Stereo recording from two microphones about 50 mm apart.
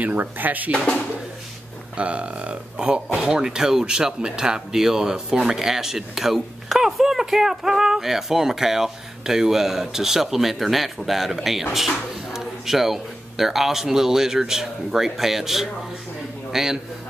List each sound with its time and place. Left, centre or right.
0.0 s speech: right
0.7 s speech: centre
2.0 s speech: right; by 16.7 s centre